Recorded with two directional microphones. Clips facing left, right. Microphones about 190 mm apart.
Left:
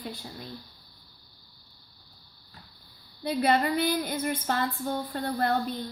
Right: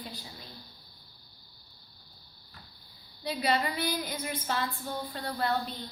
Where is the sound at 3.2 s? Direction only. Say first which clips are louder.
Left 5 dB; 55° left (ahead or behind).